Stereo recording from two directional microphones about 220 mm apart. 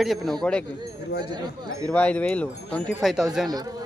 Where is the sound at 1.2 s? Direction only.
20° right (ahead or behind).